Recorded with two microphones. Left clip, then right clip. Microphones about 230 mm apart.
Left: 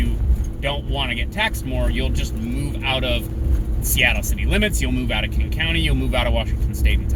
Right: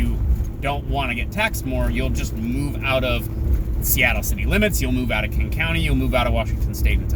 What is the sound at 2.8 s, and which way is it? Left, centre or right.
Speech, centre.